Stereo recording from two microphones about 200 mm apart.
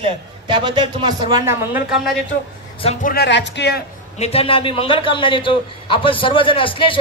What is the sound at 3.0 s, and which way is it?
Speech, 50° left (ahead or behind).